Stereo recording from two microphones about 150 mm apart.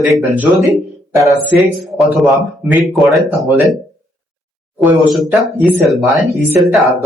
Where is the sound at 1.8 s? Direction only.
Centre (ahead or behind).